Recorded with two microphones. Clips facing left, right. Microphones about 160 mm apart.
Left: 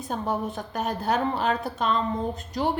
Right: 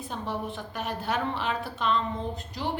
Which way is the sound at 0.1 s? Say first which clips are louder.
Left 6 dB; 45° left (ahead or behind).